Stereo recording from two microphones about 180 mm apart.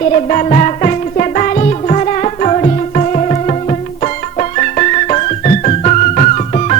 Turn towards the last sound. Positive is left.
turn(degrees=40)  # may be behind; listen again after turning